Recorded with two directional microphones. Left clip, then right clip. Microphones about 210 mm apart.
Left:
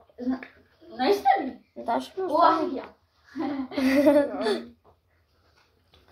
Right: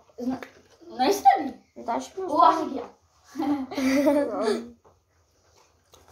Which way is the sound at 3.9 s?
15° left (ahead or behind).